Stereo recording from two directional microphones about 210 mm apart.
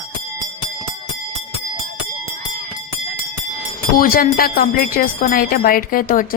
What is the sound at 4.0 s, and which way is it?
Speech, 45° left (ahead or behind).